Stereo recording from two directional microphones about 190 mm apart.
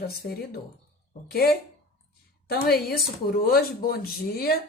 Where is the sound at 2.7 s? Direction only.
55° left (ahead or behind).